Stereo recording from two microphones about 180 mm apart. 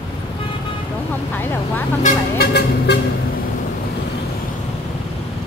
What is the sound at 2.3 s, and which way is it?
Vehicle, 65° left (ahead or behind).